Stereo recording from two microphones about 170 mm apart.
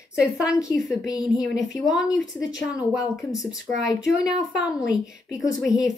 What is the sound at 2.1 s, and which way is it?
Speech, 90° left.